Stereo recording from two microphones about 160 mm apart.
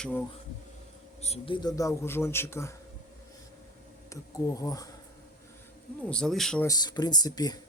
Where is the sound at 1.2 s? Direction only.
35° left (ahead or behind); by 2.7 s 15° left (ahead or behind).